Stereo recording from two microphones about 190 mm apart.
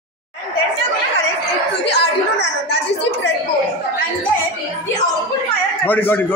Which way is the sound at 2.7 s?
65° left (ahead or behind).